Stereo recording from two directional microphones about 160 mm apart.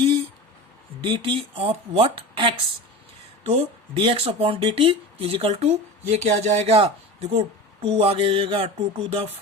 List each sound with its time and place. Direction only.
1.0 s speech: 35° right (ahead or behind)